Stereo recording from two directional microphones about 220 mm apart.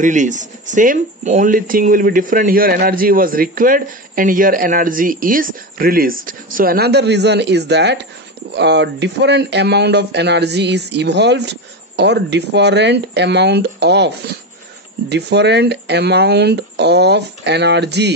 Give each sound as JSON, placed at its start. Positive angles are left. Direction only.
{"t": 0.0, "sound": "speech", "side_deg": -35}